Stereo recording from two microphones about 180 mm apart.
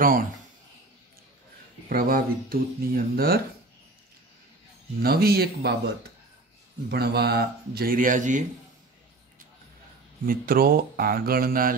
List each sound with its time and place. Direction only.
0.0 s speech: 50° right (ahead or behind)
1.9 s a man's voice: 55° right (ahead or behind)
5.0 s a man's voice: 60° right (ahead or behind)
6.9 s a man's voice: 65° right (ahead or behind); by 8.5 s 45° right (ahead or behind)
10.2 s a man's voice: 55° right (ahead or behind)